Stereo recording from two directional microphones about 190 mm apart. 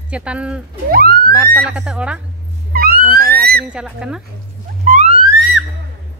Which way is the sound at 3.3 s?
55° right (ahead or behind).